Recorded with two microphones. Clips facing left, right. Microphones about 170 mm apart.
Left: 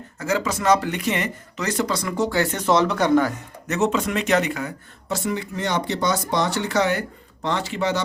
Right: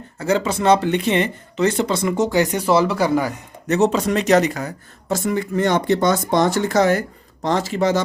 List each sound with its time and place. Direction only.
0.2 s speech: 30° right (ahead or behind); by 3.3 s 10° right (ahead or behind)
3.7 s speech: 35° right (ahead or behind)